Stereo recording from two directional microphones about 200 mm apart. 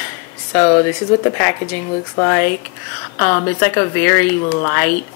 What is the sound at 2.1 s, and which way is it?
A woman's voice, 15° left (ahead or behind).